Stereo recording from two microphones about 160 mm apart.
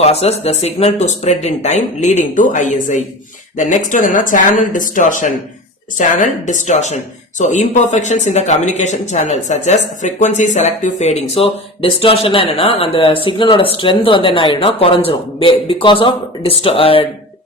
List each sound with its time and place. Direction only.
0.0 s speech: 40° left (ahead or behind)